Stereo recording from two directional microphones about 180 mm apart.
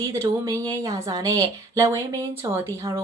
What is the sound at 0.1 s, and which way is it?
Speech, 15° right (ahead or behind).